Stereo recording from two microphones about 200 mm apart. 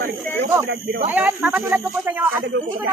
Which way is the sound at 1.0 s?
10° right (ahead or behind).